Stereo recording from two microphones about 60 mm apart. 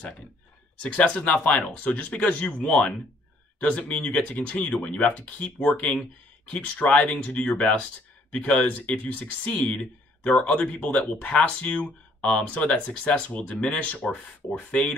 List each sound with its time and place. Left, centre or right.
0.8 s speech: left